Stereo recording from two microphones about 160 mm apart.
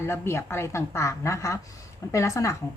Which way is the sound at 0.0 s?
15° left (ahead or behind).